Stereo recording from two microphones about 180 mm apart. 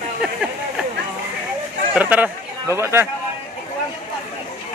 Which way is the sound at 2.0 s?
10° right (ahead or behind).